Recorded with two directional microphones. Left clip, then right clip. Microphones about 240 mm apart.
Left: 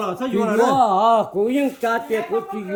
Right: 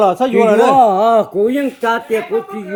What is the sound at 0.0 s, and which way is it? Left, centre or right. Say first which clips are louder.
Speech: right 11 dB; right.